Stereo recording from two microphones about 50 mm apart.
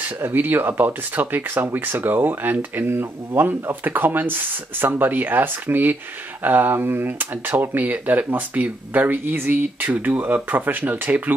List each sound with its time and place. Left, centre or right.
0.2 s speech: right